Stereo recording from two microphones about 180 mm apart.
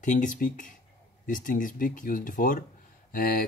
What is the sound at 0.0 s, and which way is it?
Speech, 45° left (ahead or behind).